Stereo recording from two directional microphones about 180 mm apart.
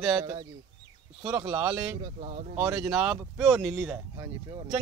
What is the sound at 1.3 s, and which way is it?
Speech, 15° right (ahead or behind).